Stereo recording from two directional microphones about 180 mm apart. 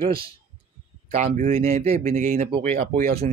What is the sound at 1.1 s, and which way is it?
Speech, 40° right (ahead or behind).